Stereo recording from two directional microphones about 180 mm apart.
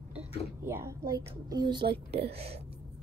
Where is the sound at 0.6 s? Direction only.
15° right (ahead or behind).